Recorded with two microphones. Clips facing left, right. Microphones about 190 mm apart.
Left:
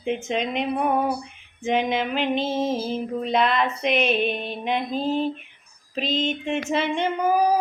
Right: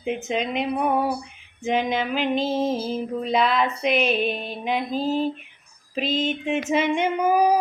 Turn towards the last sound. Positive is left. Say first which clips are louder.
# right 1 dB
turn(degrees=-15)  # may be behind; listen again after turning